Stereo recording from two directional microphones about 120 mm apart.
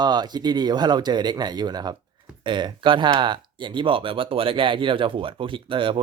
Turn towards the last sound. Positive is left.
turn(degrees=-45)  # may be behind; listen again after turning